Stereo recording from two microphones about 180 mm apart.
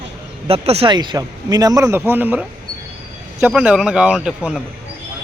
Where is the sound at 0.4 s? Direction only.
35° right (ahead or behind); by 2.4 s 10° right (ahead or behind).